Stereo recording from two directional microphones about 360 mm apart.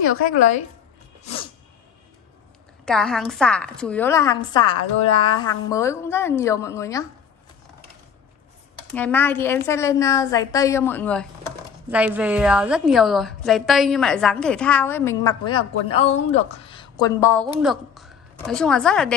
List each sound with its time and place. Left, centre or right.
0.0 s a woman's voice: left
1.2 s sneeze: centre
2.8 s a woman's voice: centre
8.9 s a woman's voice: centre